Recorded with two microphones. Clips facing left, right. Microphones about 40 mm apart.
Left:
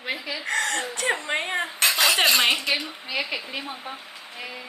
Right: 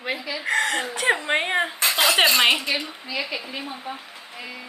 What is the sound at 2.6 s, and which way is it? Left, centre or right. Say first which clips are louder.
Speech: even; left.